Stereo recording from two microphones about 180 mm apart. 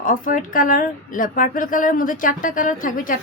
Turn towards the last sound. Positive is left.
turn(degrees=50)  # may be behind; listen again after turning